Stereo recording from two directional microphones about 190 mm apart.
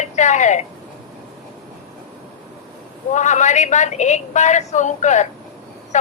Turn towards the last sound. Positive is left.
turn(degrees=40)  # may be behind; listen again after turning